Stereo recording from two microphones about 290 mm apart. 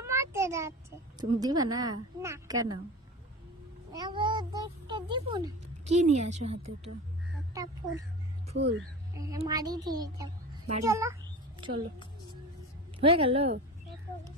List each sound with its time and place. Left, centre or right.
0.0 s a child's voice: centre
3.9 s a child's voice: centre
8.5 s speech: right
9.1 s a child's voice: centre
13.0 s a woman's voice: centre